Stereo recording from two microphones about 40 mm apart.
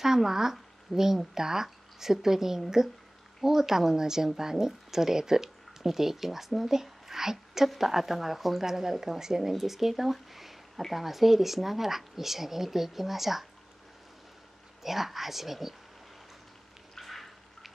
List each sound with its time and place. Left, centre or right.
0.0 s speech: centre
14.8 s speech: centre
17.0 s a sound: centre